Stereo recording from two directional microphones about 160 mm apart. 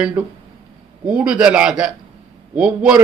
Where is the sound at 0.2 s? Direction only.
10° right (ahead or behind).